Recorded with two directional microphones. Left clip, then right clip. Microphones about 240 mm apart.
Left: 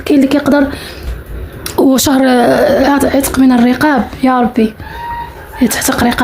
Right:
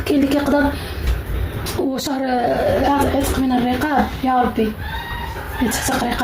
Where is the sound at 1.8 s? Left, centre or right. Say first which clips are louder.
Left 13 dB; left.